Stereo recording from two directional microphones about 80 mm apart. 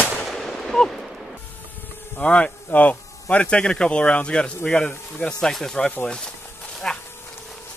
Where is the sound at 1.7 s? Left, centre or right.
Left.